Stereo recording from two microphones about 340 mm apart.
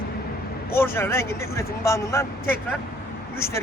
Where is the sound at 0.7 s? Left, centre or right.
Centre.